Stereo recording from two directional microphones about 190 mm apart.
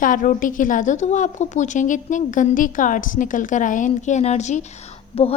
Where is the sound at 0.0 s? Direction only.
45° left (ahead or behind).